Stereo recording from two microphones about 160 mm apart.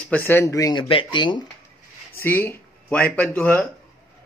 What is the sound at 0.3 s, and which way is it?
Speech, 20° left (ahead or behind).